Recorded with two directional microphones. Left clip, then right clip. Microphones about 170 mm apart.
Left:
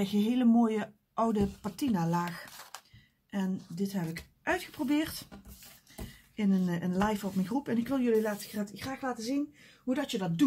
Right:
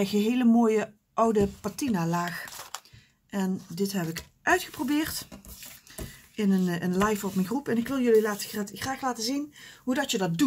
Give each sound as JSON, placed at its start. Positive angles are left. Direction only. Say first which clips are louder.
{"t": 0.0, "sound": "speech", "louder": "right 4 dB", "side_deg": -20}
{"t": 3.3, "sound": "speech", "louder": "right 5 dB", "side_deg": -25}
{"t": 6.3, "sound": "speech", "louder": "right 4 dB", "side_deg": -15}